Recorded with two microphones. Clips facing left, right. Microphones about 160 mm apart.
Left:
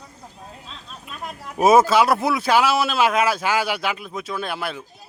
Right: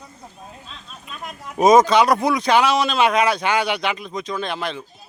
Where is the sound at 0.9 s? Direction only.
5° left (ahead or behind).